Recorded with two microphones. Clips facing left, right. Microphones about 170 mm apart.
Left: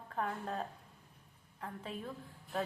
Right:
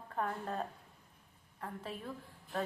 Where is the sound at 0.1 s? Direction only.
Centre (ahead or behind).